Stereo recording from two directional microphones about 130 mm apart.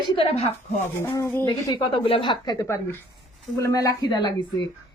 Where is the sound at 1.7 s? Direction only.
40° left (ahead or behind).